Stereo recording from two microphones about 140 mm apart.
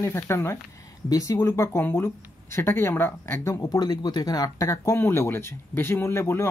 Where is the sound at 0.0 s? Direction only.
20° left (ahead or behind).